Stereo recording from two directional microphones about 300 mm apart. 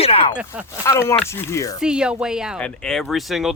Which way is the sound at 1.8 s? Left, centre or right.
Centre.